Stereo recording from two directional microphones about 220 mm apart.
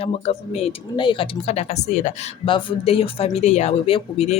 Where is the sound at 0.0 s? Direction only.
30° left (ahead or behind).